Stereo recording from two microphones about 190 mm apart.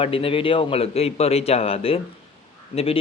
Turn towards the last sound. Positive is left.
turn(degrees=30)  # may be behind; listen again after turning